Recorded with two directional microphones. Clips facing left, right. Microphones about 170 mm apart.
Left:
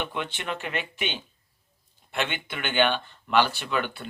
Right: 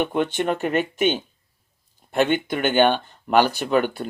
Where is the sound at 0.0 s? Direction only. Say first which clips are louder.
Right 10 dB; 45° right (ahead or behind).